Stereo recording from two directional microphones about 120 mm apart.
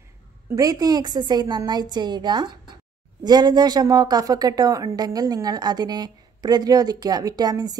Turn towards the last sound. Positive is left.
turn(degrees=-35)  # may be behind; listen again after turning